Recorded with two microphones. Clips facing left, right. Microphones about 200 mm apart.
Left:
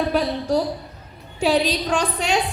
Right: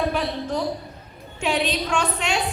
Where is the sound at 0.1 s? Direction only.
35° left (ahead or behind).